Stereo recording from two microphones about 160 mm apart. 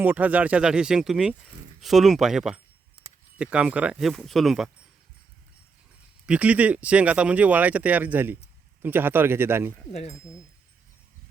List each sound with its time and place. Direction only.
0.0 s speech: 10° right (ahead or behind)
6.2 s speech: 10° right (ahead or behind)
9.9 s speech: 45° left (ahead or behind)